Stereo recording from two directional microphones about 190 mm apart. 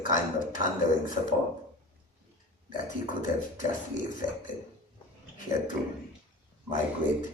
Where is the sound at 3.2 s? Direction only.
45° left (ahead or behind).